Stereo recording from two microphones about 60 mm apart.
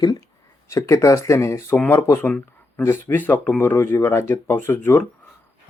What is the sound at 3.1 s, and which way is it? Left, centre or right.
Speech, left.